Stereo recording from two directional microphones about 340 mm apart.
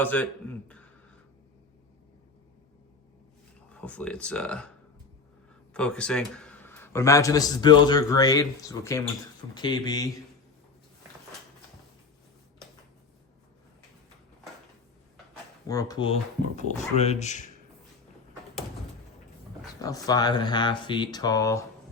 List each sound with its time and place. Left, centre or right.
0.0 s speech: centre
3.7 s speech: centre
5.7 s a man's voice: centre
15.6 s a man's voice: centre
19.8 s a man's voice: centre